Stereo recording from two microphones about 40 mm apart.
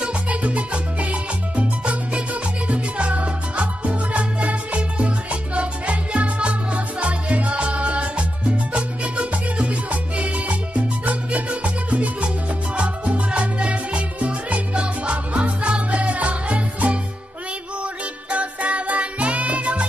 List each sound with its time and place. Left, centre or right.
0.0 s salsa music: right
12.7 s music: right
18.3 s music: right